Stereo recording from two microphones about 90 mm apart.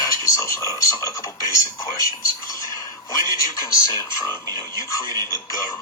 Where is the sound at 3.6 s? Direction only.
35° left (ahead or behind).